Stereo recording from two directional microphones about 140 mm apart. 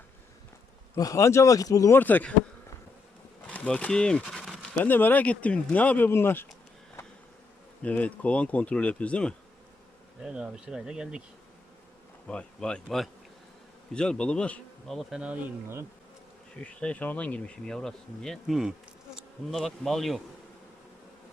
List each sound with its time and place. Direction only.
0.9 s speech: 25° left (ahead or behind)
2.0 s speech: 15° left (ahead or behind)
3.4 s speech: 10° left (ahead or behind)
7.8 s speech: 10° left (ahead or behind)
10.2 s speech: 5° right (ahead or behind)
12.3 s speech: 5° left (ahead or behind); by 15.9 s 15° right (ahead or behind)
16.6 s speech: 10° left (ahead or behind)
19.1 s bee: centre (ahead or behind)